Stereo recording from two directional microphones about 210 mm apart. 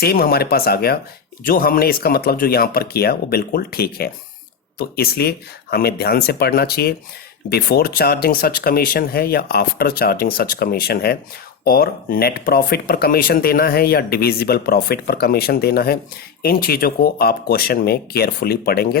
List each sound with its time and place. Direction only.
0.0 s speech: 45° left (ahead or behind)